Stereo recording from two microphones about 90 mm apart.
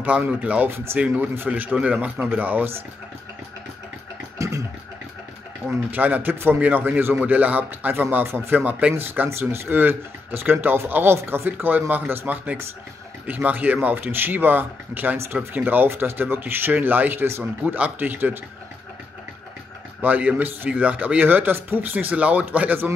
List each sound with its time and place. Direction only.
0.0 s speech: 15° right (ahead or behind)
0.7 s a man's voice: 25° right (ahead or behind)
1.0 s speech: 15° right (ahead or behind)
4.4 s scratching: 35° right (ahead or behind)
5.7 s a man's voice: 20° right (ahead or behind)
20.0 s a man's voice: 15° right (ahead or behind)